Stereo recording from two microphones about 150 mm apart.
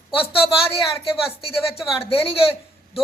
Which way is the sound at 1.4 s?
40° left (ahead or behind).